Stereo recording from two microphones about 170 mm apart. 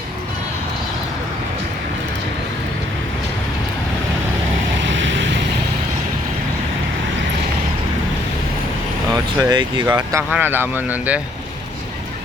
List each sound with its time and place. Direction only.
4.8 s vehicle: 90° right
9.1 s speech: 25° right (ahead or behind)